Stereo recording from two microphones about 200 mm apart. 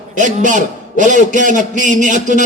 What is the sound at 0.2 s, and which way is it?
A man's voice, 40° right (ahead or behind).